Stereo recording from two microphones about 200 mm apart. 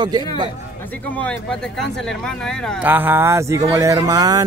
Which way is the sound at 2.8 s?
10° right (ahead or behind).